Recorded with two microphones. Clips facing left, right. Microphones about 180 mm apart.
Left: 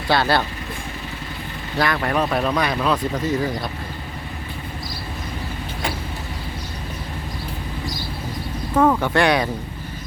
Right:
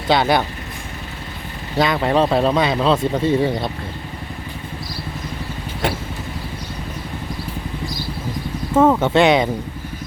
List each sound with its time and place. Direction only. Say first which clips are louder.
0.1 s speech: right 3 dB; 20° right (ahead or behind)
1.8 s speech: right 4 dB; 20° right (ahead or behind)
8.7 s speech: right 3 dB; 25° right (ahead or behind)